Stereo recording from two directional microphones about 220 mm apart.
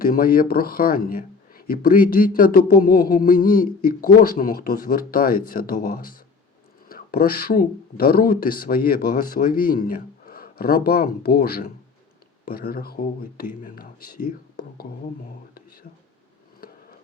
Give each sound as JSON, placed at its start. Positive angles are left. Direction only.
{"t": 0.0, "sound": "speech", "side_deg": 40}